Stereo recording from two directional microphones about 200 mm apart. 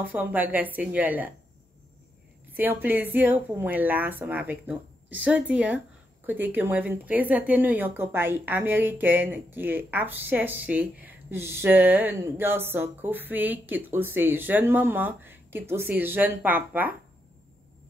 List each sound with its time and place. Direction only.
0.0 s a woman's voice: 10° right (ahead or behind)
2.5 s a woman's voice: 10° right (ahead or behind)